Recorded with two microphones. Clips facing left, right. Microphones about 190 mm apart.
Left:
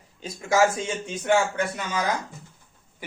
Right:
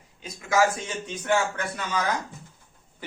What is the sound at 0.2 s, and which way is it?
Speech, 30° left (ahead or behind).